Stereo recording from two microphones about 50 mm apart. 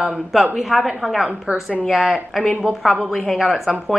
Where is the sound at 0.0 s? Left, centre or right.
Centre.